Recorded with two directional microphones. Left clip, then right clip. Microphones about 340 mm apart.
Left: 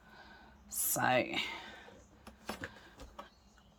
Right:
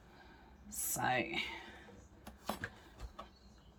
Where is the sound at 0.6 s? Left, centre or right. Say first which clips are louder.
Left 4 dB; centre.